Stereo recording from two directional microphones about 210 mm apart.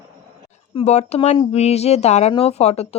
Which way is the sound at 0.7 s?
30° left (ahead or behind).